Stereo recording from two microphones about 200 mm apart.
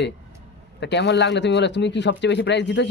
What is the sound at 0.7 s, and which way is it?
Speech, 60° left (ahead or behind).